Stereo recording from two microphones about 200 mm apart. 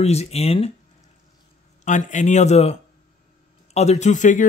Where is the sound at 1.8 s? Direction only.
40° left (ahead or behind).